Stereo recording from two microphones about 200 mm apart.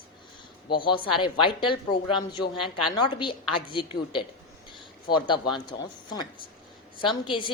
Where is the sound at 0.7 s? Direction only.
25° left (ahead or behind).